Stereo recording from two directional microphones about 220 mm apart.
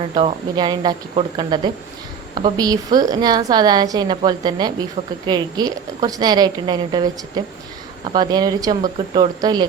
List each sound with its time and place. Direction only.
0.1 s a woman's voice: 25° right (ahead or behind)